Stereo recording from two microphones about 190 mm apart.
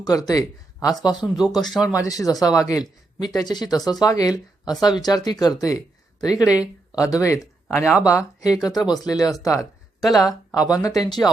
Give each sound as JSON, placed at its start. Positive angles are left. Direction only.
{"t": 0.0, "sound": "speech", "side_deg": 20}
{"t": 6.6, "sound": "speech", "side_deg": -5}
{"t": 7.1, "sound": "speech", "side_deg": 15}
{"t": 9.6, "sound": "speech", "side_deg": 0}
{"t": 10.2, "sound": "speech", "side_deg": 20}